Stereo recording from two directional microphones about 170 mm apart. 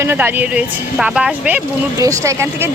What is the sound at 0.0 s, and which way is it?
Speech, 15° right (ahead or behind).